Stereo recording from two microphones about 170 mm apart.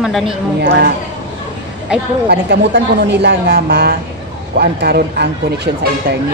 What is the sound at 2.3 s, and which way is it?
A woman's voice, 80° right.